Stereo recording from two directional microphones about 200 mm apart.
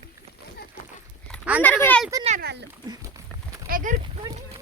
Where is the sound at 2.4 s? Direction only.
60° right (ahead or behind).